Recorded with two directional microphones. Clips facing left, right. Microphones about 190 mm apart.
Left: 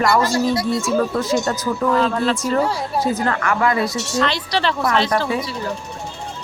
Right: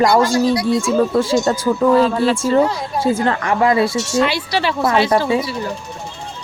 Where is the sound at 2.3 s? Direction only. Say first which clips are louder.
Right 4 dB; 25° right (ahead or behind).